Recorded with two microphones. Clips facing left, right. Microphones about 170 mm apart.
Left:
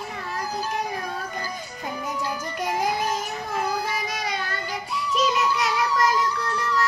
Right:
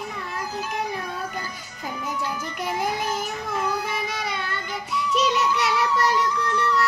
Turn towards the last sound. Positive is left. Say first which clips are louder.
# right 2 dB
turn(degrees=-70)  # may be behind; listen again after turning